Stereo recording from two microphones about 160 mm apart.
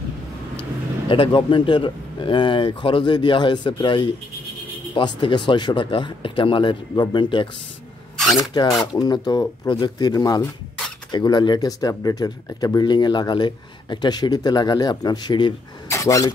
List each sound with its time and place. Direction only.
1.0 s speech: 35° left (ahead or behind)